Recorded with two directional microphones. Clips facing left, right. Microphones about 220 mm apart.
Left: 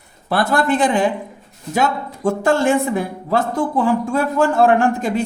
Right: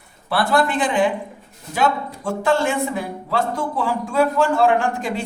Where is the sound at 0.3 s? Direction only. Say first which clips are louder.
Left 2 dB; 45° left (ahead or behind).